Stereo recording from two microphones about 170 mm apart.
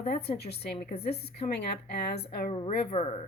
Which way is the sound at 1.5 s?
75° left (ahead or behind).